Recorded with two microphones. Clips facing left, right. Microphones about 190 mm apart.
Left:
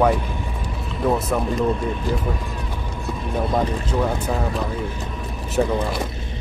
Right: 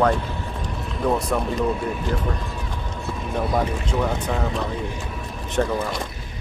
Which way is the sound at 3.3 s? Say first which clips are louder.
Left 1 dB; 5° left (ahead or behind).